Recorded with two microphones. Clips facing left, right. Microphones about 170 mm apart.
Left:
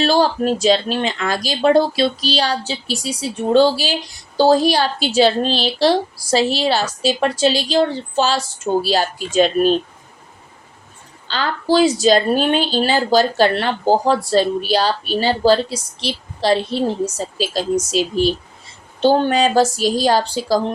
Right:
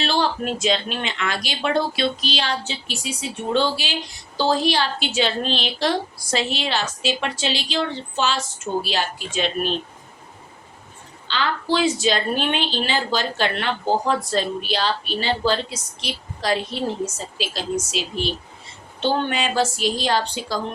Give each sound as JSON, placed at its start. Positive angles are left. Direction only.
{"t": 0.0, "sound": "a woman's voice", "side_deg": 40}
{"t": 11.3, "sound": "a woman's voice", "side_deg": 40}